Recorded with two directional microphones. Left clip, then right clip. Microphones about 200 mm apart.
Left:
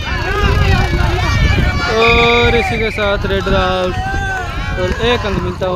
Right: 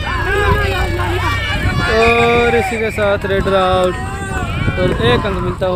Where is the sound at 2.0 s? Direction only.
Centre (ahead or behind).